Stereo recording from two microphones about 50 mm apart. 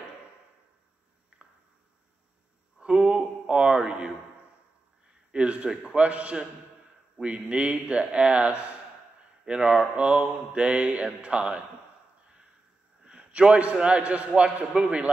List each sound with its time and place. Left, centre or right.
1.3 s a sound: right
2.8 s a sound: centre
5.3 s mantra: right
9.4 s speech: centre
9.9 s mantra: right
13.0 s a man's voice: right
14.7 s mantra: centre